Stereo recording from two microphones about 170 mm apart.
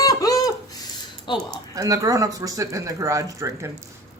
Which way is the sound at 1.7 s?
20° right (ahead or behind).